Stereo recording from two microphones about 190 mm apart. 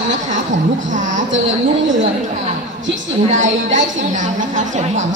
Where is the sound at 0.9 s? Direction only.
40° right (ahead or behind).